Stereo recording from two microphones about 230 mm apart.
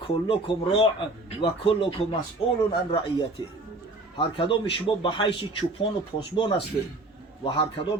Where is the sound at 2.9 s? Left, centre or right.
Left.